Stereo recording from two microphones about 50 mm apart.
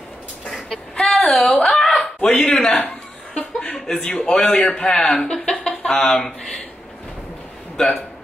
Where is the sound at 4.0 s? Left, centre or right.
Left.